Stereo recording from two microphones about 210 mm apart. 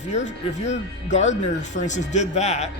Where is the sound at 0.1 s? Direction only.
35° left (ahead or behind).